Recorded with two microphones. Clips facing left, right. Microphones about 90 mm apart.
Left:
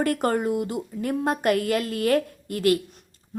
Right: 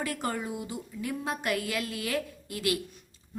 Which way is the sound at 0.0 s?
55° left (ahead or behind).